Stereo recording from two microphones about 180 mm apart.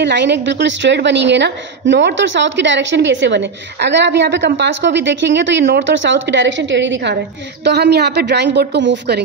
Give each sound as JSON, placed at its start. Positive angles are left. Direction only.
{"t": 0.0, "sound": "a woman's voice", "side_deg": -75}
{"t": 7.6, "sound": "a woman's voice", "side_deg": -65}